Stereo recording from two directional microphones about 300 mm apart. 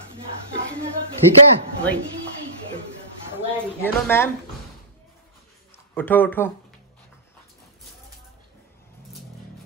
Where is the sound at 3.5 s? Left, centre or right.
Centre.